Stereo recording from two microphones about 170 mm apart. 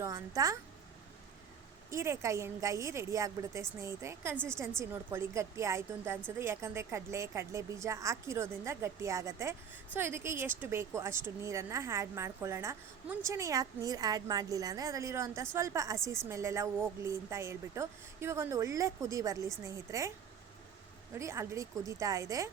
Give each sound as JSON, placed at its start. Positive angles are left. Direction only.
{"t": 0.0, "sound": "a woman's voice", "side_deg": -20}
{"t": 1.9, "sound": "a woman's voice", "side_deg": -15}
{"t": 21.2, "sound": "a woman's voice", "side_deg": -15}